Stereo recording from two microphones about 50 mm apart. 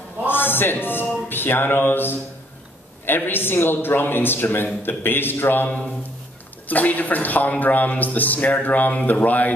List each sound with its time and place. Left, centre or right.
0.3 s a man's voice: left